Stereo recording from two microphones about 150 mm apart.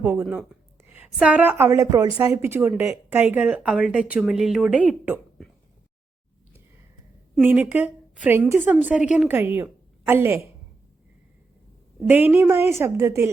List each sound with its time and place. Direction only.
0.0 s speech: 15° right (ahead or behind)
7.3 s speech: 10° right (ahead or behind)
12.0 s speech: 10° right (ahead or behind)